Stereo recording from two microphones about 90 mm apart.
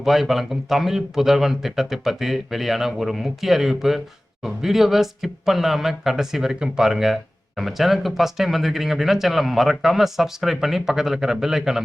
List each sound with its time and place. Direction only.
0.0 s speech: 5° right (ahead or behind)